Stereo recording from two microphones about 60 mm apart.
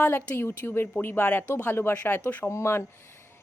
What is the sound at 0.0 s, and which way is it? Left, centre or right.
A woman's voice, left.